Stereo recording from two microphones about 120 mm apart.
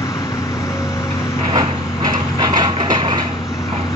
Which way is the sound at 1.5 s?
35° right (ahead or behind).